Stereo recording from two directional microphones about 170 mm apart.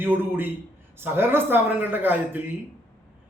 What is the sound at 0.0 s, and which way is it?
A man's voice, 10° right (ahead or behind).